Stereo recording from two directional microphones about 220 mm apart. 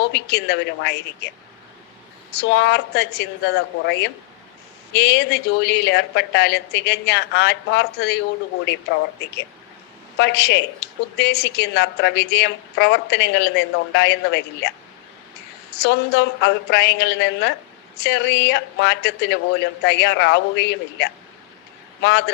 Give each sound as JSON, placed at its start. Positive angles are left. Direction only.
{"t": 0.1, "sound": "a woman's voice", "side_deg": 50}
{"t": 2.4, "sound": "a woman's voice", "side_deg": 50}
{"t": 10.2, "sound": "a woman's voice", "side_deg": 50}
{"t": 15.8, "sound": "a woman's voice", "side_deg": 50}